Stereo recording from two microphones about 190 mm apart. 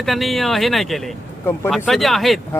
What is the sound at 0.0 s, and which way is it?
Speech, centre (ahead or behind).